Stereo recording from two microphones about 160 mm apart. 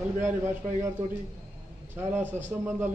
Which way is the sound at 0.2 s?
15° right (ahead or behind).